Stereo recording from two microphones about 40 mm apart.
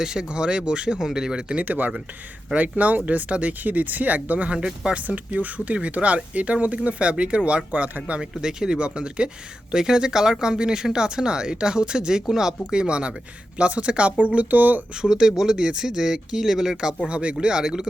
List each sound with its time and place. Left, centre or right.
0.0 s speech: centre
1.5 s speech: right
3.6 s speech: right
4.5 s speech: centre
4.9 s speech: right
8.2 s speech: centre; by 14.8 s right
14.9 s speech: centre
17.1 s speech: right
17.4 s speech: centre